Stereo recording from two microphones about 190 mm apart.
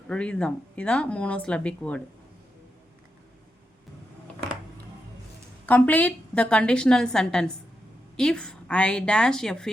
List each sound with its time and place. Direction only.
0.1 s a woman's voice: 5° left (ahead or behind)
5.6 s a woman's voice: 10° left (ahead or behind)